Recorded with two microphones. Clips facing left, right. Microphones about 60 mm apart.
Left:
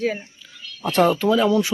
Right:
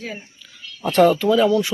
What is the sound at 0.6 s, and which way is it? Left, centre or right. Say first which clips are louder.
Speech: right 3 dB; centre.